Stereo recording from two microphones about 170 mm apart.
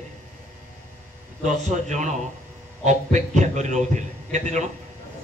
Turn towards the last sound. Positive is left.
turn(degrees=-45)  # may be behind; listen again after turning